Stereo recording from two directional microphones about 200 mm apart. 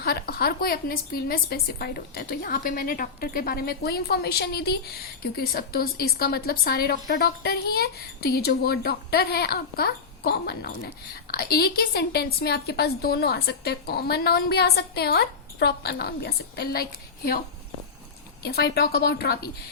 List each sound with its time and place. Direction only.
0.0 s a woman's voice: 50° left (ahead or behind)
18.4 s a woman's voice: 55° left (ahead or behind)